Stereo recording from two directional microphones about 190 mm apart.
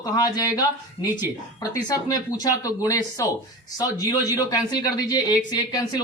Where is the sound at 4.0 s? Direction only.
20° left (ahead or behind).